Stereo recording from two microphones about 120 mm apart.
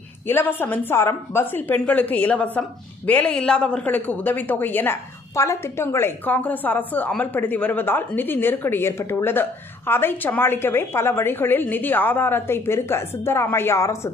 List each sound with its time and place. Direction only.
0.3 s a woman's voice: 15° left (ahead or behind)